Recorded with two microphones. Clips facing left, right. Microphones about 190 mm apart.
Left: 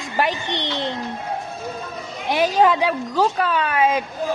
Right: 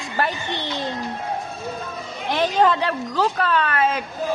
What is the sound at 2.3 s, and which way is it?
Speech, 10° left (ahead or behind).